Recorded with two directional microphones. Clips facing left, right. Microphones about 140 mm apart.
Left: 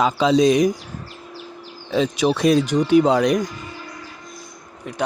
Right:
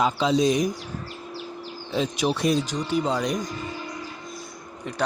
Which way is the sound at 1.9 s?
90° left.